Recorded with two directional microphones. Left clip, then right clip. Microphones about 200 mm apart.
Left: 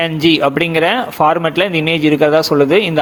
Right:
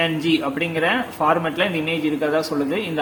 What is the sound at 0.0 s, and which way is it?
Speech, 40° left (ahead or behind).